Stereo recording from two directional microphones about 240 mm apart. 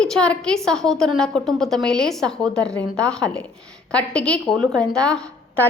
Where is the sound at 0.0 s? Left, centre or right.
Centre.